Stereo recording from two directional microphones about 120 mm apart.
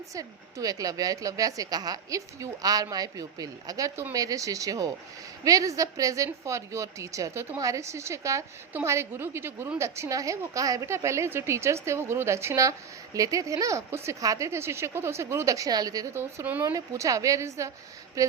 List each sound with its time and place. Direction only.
0.1 s a woman's voice: 30° right (ahead or behind)
16.1 s a woman's voice: 20° right (ahead or behind)